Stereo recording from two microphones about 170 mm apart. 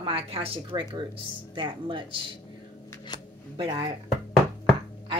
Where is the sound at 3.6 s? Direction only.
30° right (ahead or behind).